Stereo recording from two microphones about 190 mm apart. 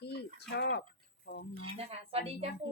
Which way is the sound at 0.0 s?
60° left (ahead or behind).